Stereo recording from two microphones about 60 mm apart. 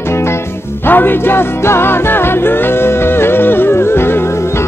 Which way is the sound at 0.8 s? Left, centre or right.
Left.